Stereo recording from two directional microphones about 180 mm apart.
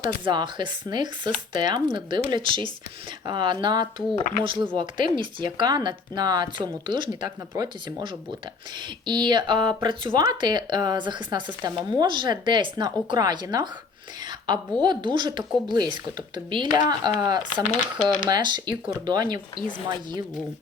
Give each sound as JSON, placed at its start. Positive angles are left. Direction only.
{"t": 0.3, "sound": "speech", "side_deg": -25}
{"t": 4.1, "sound": "speech", "side_deg": 45}
{"t": 4.4, "sound": "speech", "side_deg": -30}
{"t": 17.5, "sound": "speech", "side_deg": 45}
{"t": 18.3, "sound": "speech", "side_deg": -25}